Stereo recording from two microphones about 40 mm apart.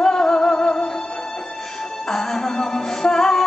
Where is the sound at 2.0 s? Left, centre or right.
Centre.